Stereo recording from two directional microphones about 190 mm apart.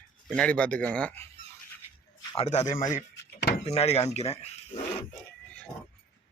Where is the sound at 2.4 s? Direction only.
35° left (ahead or behind).